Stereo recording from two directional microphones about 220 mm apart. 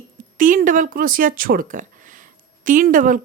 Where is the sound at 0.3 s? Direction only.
35° right (ahead or behind).